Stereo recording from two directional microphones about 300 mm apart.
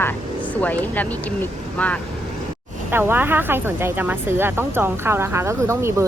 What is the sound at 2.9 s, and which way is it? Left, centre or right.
Speech, centre.